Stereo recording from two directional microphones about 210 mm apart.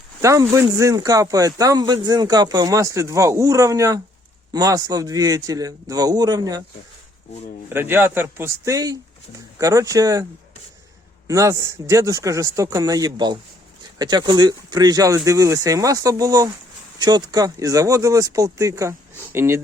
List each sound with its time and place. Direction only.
0.2 s speech: 15° right (ahead or behind)
7.7 s speech: 10° right (ahead or behind)
11.3 s speech: 15° right (ahead or behind)